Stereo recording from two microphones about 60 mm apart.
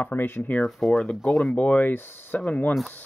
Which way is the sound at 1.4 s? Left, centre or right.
Left.